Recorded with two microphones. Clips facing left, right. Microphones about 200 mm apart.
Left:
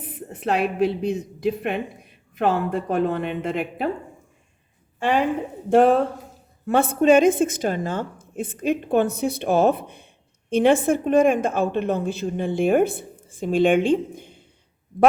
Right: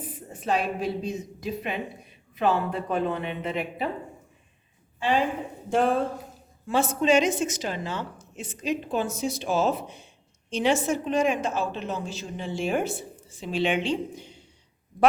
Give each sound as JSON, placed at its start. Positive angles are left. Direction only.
{"t": 0.0, "sound": "a woman's voice", "side_deg": 65}
{"t": 4.9, "sound": "a woman's voice", "side_deg": 60}